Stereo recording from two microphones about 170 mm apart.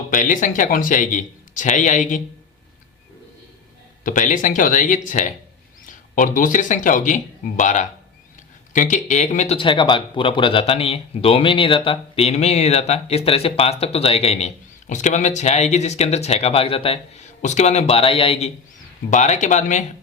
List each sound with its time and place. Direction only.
0.1 s a man's voice: 50° left (ahead or behind)
4.0 s a man's voice: 50° left (ahead or behind)
9.6 s a man's voice: 30° left (ahead or behind); by 19.8 s 45° left (ahead or behind)